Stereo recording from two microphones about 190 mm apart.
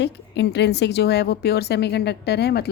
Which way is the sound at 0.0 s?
65° left (ahead or behind).